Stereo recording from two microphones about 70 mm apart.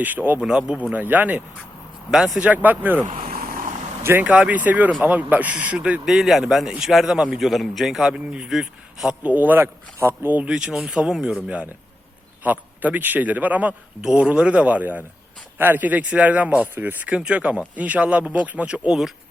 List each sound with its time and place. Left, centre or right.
0.0 s speech: right
0.3 s speech: centre
0.8 s speech: right
2.0 s a man's voice: centre
2.4 s speech: right
4.2 s speech: centre
6.1 s a man's voice: centre
9.2 s speech: right
10.0 s speech: right
10.5 s speech: centre; by 17.2 s right
17.2 s speech: centre